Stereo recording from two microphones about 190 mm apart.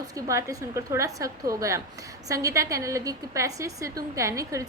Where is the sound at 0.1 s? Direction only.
15° right (ahead or behind).